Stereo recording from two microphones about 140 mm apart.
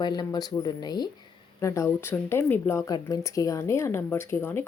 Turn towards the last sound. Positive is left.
turn(degrees=15)  # may be behind; listen again after turning